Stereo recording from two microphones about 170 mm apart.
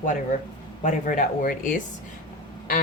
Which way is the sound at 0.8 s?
50° left (ahead or behind).